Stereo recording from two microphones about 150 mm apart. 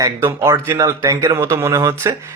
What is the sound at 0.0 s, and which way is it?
Speech, 15° right (ahead or behind).